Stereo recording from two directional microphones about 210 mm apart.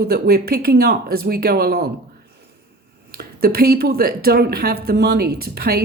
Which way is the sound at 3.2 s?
45° right (ahead or behind).